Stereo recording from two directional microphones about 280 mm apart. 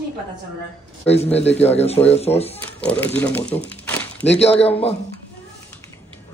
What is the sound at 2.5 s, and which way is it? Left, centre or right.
Speech, centre.